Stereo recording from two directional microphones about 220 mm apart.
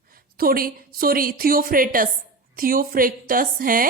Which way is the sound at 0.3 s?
40° right (ahead or behind).